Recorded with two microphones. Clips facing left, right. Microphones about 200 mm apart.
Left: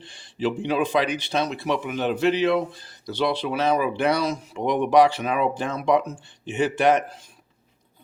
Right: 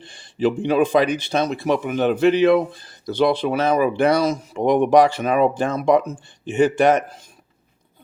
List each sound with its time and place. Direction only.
0.0 s speech: 50° right (ahead or behind)